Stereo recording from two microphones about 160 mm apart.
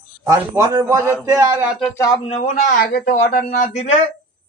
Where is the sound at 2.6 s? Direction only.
60° left (ahead or behind).